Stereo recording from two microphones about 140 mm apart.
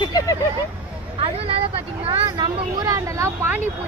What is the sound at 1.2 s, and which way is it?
Speech, 45° right (ahead or behind).